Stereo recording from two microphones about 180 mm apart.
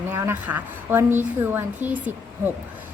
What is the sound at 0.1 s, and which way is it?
Speech, 15° right (ahead or behind).